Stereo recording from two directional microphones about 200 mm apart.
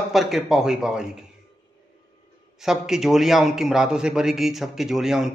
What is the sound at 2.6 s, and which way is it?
A man's voice, centre (ahead or behind).